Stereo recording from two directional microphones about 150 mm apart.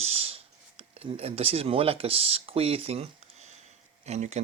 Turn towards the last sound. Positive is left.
turn(degrees=-45)  # may be behind; listen again after turning